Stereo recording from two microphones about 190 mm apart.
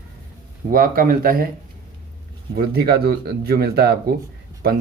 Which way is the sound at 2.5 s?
55° right (ahead or behind).